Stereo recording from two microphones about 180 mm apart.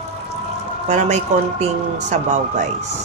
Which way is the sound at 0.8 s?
40° right (ahead or behind).